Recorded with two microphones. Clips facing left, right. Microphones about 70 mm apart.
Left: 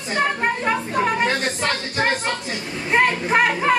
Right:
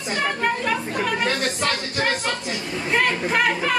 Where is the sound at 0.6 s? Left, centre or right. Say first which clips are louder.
Left 3 dB; left.